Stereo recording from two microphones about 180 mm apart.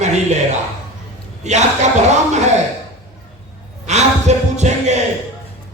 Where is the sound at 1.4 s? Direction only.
40° right (ahead or behind).